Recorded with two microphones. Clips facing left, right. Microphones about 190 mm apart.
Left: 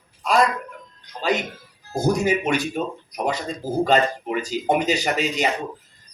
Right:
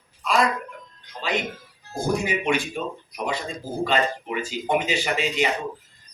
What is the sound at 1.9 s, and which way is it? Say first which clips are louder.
Speech: left 4 dB; 45° left (ahead or behind).